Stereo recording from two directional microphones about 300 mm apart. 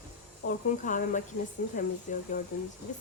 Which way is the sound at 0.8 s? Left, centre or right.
Left.